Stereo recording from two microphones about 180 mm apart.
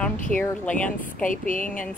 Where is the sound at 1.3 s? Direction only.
45° left (ahead or behind).